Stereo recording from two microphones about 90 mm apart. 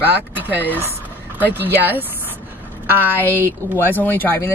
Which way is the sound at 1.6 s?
20° right (ahead or behind).